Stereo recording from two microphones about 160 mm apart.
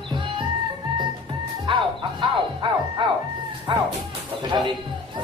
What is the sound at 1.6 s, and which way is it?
Music, 30° right (ahead or behind).